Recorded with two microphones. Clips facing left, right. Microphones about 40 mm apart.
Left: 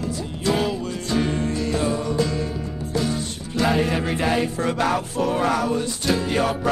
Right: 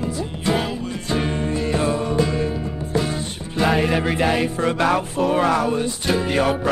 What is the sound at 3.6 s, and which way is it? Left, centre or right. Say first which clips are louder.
Music: right 2 dB; centre.